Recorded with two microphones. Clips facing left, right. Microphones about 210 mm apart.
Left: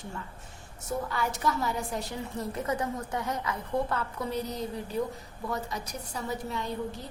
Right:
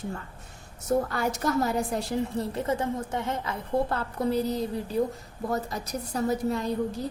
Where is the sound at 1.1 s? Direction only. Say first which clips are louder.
Right 4 dB; 45° right (ahead or behind).